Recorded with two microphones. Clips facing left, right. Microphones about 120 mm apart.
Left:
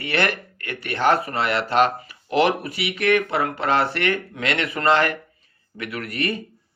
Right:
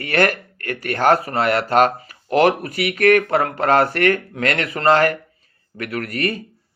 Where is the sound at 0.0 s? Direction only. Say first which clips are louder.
Right 5 dB; 45° right (ahead or behind).